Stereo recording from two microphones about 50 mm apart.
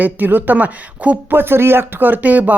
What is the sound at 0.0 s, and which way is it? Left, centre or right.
Speech, right.